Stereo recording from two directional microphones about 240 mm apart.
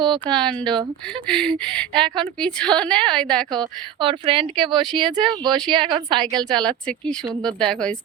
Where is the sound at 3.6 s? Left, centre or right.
Centre.